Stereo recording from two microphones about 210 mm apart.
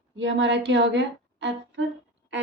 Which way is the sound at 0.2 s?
60° right (ahead or behind).